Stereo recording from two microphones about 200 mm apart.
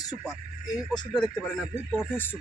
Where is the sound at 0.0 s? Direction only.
20° left (ahead or behind).